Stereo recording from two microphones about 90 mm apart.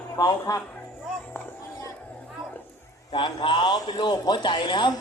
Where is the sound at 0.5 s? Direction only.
45° left (ahead or behind).